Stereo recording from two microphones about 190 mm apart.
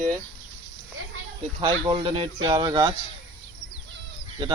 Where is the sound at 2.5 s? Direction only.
20° right (ahead or behind).